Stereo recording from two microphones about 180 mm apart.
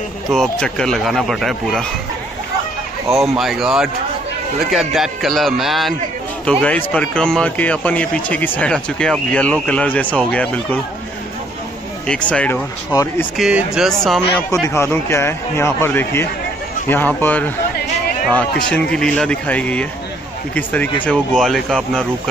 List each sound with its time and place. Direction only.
0.3 s speech: 5° left (ahead or behind)
3.1 s a man's voice: centre (ahead or behind)
12.1 s a man's voice: 5° left (ahead or behind)
12.9 s a man's voice: 20° left (ahead or behind)
13.4 s speech: 5° right (ahead or behind)
14.5 s a man's voice: 15° left (ahead or behind)